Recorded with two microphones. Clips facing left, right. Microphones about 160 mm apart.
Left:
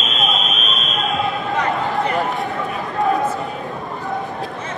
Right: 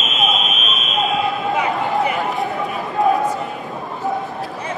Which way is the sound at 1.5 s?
5° right (ahead or behind).